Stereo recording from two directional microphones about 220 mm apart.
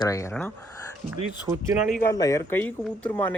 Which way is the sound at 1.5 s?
10° right (ahead or behind).